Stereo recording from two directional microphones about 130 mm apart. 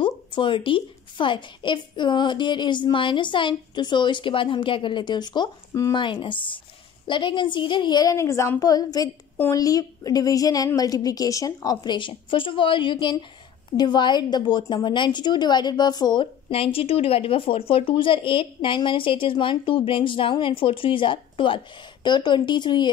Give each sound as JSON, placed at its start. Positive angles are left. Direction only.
{"t": 0.0, "sound": "a woman's voice", "side_deg": 40}